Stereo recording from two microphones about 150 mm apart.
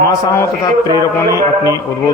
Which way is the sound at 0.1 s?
25° left (ahead or behind).